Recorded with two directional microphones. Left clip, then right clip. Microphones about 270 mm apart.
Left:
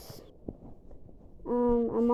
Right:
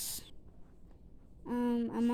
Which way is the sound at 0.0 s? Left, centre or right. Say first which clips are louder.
Right 4 dB; right.